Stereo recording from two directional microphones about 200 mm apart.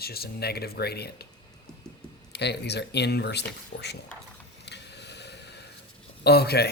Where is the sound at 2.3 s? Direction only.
55° left (ahead or behind).